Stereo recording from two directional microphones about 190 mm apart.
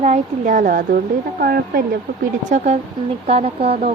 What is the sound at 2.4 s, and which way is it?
Speech, 35° right (ahead or behind).